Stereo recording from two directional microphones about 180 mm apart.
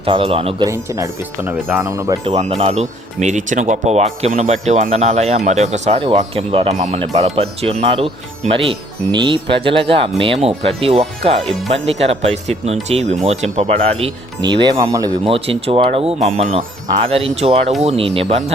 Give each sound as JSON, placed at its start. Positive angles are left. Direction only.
{"t": 0.0, "sound": "speech", "side_deg": -30}
{"t": 0.7, "sound": "speech", "side_deg": -15}
{"t": 2.2, "sound": "speech", "side_deg": -35}
{"t": 9.1, "sound": "speech", "side_deg": -25}
{"t": 15.2, "sound": "speech", "side_deg": -30}